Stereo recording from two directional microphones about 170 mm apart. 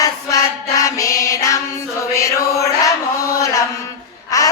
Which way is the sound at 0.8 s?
20° left (ahead or behind).